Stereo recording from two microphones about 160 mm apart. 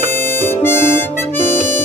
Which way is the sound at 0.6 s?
15° left (ahead or behind).